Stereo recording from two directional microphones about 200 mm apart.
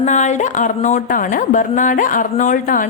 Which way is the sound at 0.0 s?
35° left (ahead or behind).